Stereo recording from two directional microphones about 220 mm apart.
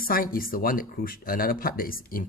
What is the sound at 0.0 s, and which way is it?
Speech, 40° left (ahead or behind).